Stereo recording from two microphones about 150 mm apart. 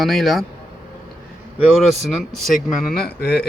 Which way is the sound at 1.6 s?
5° right (ahead or behind).